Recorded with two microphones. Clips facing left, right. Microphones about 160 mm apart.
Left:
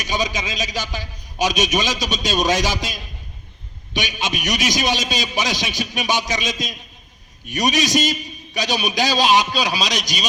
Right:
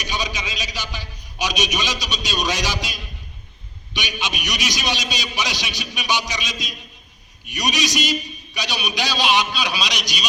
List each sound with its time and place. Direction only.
0.0 s a man's voice: 45° left (ahead or behind)